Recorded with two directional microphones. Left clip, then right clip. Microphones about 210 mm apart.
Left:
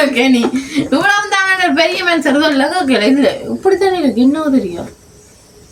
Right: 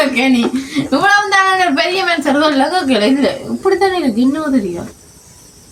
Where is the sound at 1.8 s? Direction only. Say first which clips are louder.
Left 2 dB; 15° left (ahead or behind).